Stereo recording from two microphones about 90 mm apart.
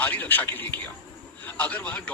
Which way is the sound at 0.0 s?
20° left (ahead or behind).